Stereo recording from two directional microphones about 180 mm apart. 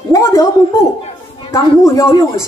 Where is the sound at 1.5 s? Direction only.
15° left (ahead or behind).